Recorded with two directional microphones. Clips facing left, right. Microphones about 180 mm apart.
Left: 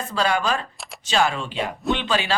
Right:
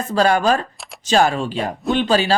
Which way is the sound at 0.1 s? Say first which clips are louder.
Right 7 dB; 45° right (ahead or behind).